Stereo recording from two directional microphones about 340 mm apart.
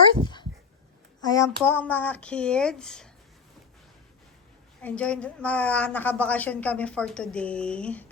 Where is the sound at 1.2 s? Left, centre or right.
Centre.